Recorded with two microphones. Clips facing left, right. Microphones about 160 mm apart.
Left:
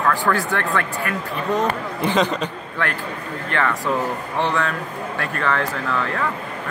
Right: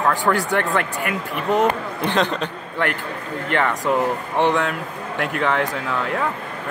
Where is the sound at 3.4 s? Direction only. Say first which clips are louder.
Right 2 dB; 20° right (ahead or behind).